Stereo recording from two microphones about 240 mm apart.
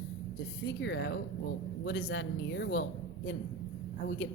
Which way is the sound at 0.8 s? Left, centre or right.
Left.